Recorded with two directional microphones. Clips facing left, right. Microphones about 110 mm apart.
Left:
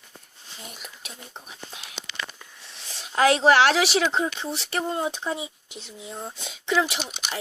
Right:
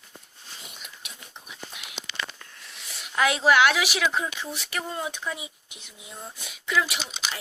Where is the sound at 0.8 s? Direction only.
40° left (ahead or behind).